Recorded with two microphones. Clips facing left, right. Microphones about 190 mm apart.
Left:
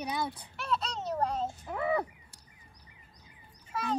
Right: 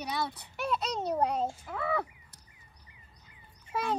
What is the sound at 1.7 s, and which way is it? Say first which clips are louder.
Speech: left 2 dB; 20° left (ahead or behind).